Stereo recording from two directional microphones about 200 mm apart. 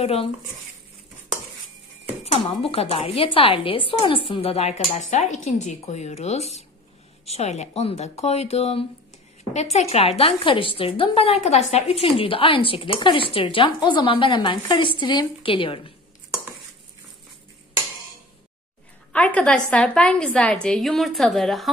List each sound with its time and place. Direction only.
0.0 s speech: 30° left (ahead or behind)
2.3 s a woman's voice: 30° left (ahead or behind)
19.1 s a woman's voice: 5° left (ahead or behind)